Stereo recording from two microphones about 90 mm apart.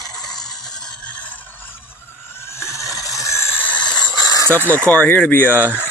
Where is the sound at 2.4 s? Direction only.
30° left (ahead or behind).